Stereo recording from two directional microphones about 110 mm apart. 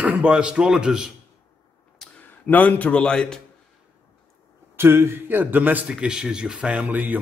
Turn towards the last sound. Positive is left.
turn(degrees=-15)  # may be behind; listen again after turning